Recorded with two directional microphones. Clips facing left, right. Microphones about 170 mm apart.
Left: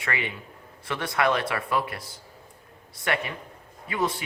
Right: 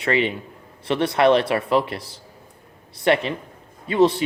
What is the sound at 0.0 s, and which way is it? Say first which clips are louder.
Speech: right 10 dB; 25° right (ahead or behind).